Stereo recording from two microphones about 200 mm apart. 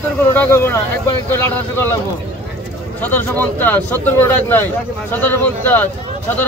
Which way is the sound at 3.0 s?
10° left (ahead or behind).